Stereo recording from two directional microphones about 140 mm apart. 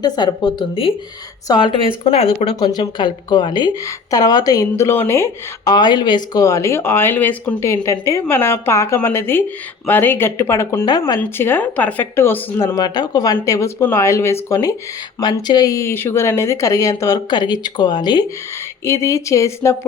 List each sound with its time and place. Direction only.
0.0 s speech: 30° left (ahead or behind)
2.6 s speech: 30° left (ahead or behind)
5.7 s speech: 30° left (ahead or behind)